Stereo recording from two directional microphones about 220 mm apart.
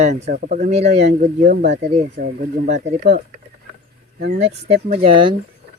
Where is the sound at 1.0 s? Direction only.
45° right (ahead or behind).